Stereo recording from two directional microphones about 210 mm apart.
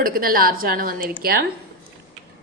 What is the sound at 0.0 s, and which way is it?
A woman's voice, 45° right (ahead or behind).